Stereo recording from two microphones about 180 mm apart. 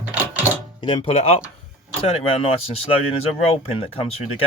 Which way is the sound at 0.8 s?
30° left (ahead or behind).